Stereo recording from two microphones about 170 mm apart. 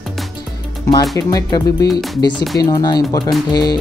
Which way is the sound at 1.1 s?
20° left (ahead or behind).